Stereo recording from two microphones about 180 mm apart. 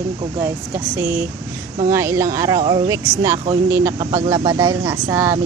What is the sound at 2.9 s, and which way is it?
Speech, 20° right (ahead or behind).